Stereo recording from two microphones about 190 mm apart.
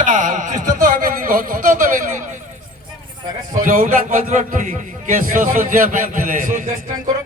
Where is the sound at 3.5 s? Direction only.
45° right (ahead or behind).